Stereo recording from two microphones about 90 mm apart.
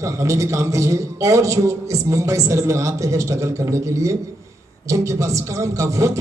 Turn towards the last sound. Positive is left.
turn(degrees=-35)  # may be behind; listen again after turning